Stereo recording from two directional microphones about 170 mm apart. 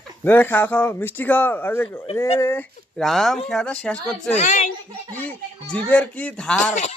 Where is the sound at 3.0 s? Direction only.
Centre (ahead or behind).